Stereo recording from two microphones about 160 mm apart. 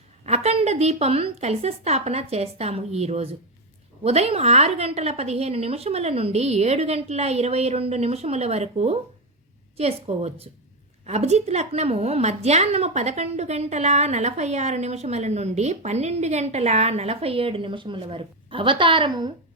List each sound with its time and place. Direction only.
0.3 s a woman's voice: 40° right (ahead or behind)